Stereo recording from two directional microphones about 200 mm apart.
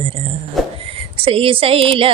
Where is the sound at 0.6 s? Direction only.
Centre (ahead or behind).